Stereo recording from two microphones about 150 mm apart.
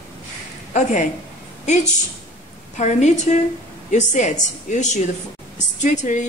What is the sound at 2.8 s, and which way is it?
Speech, 50° left (ahead or behind).